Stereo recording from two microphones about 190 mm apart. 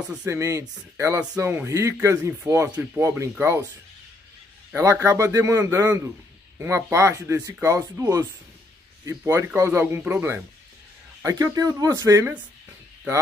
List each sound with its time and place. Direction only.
0.1 s speech: 10° right (ahead or behind)
4.7 s speech: 15° right (ahead or behind)